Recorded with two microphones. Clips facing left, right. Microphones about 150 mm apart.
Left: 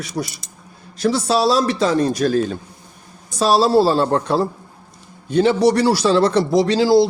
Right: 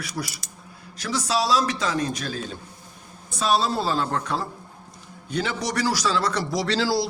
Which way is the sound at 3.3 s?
35° left (ahead or behind).